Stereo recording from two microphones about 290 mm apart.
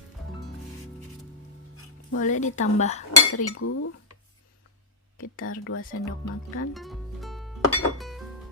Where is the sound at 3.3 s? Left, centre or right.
Left.